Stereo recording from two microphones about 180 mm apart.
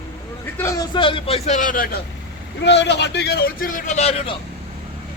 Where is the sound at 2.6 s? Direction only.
70° left (ahead or behind); by 4.4 s 35° left (ahead or behind).